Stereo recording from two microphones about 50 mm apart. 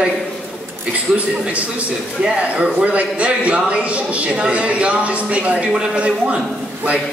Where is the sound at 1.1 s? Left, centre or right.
Right.